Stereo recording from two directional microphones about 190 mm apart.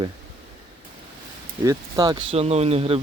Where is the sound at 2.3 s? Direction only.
35° right (ahead or behind).